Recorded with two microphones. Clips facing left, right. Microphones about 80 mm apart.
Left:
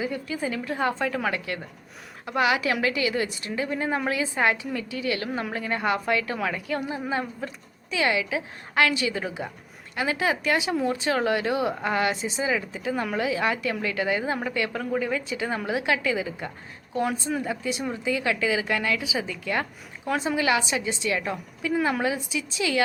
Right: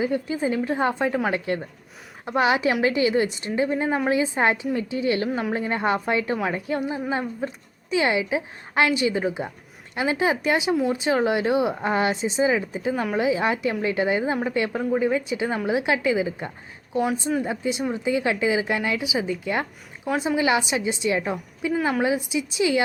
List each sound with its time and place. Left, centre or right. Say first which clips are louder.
0.0 s a woman's voice: right 5 dB; right
13.1 s a woman's voice: right 4 dB; right